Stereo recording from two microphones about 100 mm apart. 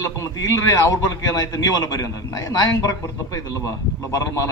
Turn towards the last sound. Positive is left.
turn(degrees=30)  # may be behind; listen again after turning